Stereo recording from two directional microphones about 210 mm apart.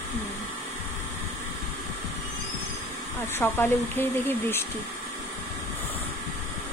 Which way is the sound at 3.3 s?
10° left (ahead or behind).